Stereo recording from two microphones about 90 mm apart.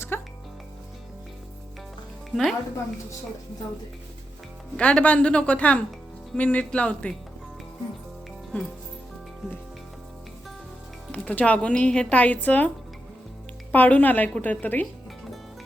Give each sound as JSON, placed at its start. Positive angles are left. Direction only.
{"t": 0.1, "sound": "music", "side_deg": 25}
{"t": 2.3, "sound": "speech", "side_deg": 0}
{"t": 4.8, "sound": "speech", "side_deg": 15}
{"t": 11.1, "sound": "speech", "side_deg": 15}
{"t": 13.7, "sound": "a woman's voice", "side_deg": 20}